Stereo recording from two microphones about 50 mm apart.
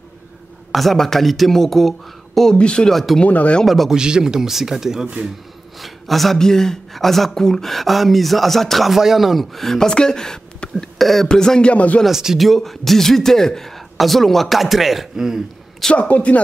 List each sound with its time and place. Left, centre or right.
0.7 s speech: centre
2.5 s a man's voice: centre
2.9 s speech: centre
3.3 s speech: left
3.6 s speech: centre
3.9 s speech: centre
5.8 s a man's voice: centre
11.7 s a man's voice: left
12.1 s speech: centre
12.4 s speech: centre
15.9 s a man's voice: left